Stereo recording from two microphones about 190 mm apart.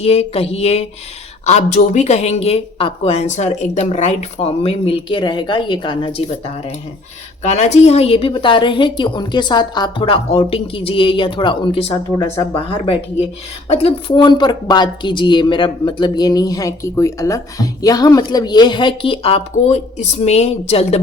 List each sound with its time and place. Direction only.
0.0 s a woman's voice: 30° left (ahead or behind)